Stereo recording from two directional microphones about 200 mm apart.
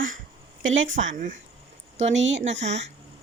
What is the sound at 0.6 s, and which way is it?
Speech, 75° right (ahead or behind).